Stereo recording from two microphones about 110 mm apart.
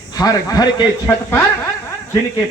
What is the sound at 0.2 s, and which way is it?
Speech, 40° left (ahead or behind).